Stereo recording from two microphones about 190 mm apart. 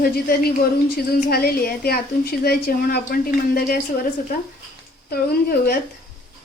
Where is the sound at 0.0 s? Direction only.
50° left (ahead or behind).